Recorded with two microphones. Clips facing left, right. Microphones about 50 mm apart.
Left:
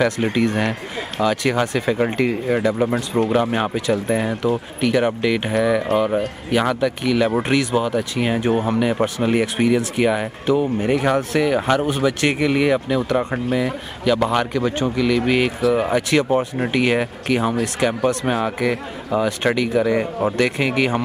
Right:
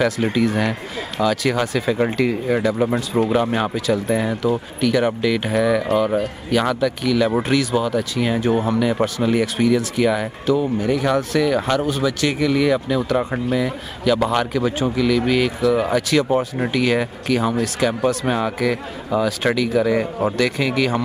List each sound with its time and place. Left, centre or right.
0.0 s speech: centre
1.2 s speech: left
16.3 s speech: centre
16.7 s speech: left; by 20.3 s centre
20.3 s speech: left